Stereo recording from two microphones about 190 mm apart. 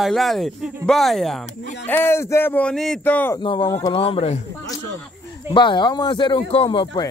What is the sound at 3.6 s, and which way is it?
Speech, 15° left (ahead or behind).